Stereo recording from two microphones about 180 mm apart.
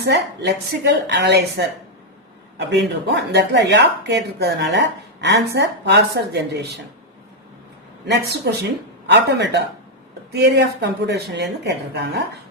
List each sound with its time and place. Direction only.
0.0 s speech: 65° right (ahead or behind)
8.0 s speech: 70° right (ahead or behind)